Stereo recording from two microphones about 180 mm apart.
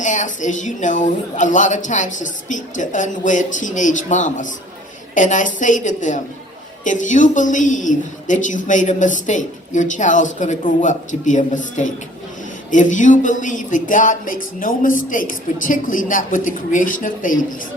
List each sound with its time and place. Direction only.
0.0 s a woman's voice: 45° left (ahead or behind)